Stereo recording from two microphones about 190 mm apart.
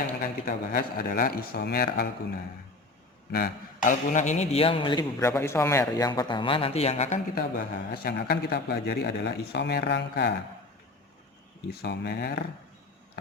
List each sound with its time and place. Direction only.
0.2 s a man's voice: 50° left (ahead or behind)
3.3 s a man's voice: 45° left (ahead or behind); by 5.3 s 25° left (ahead or behind)
5.3 s a man's voice: 15° left (ahead or behind); by 10.4 s 60° left (ahead or behind)
11.7 s a man's voice: 55° left (ahead or behind)